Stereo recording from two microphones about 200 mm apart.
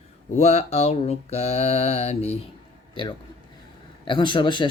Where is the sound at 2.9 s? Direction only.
25° left (ahead or behind).